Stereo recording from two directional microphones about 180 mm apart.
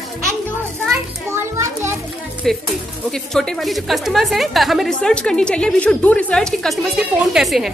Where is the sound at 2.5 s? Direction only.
Centre (ahead or behind).